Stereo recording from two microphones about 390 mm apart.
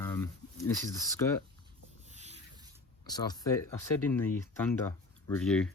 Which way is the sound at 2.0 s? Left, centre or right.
Centre.